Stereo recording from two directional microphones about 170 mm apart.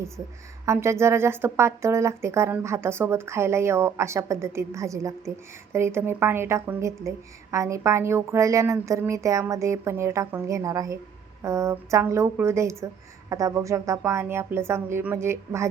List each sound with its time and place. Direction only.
0.6 s a woman's voice: 15° right (ahead or behind)